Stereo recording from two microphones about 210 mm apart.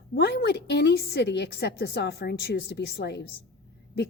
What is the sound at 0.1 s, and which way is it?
A woman's voice, 55° left (ahead or behind).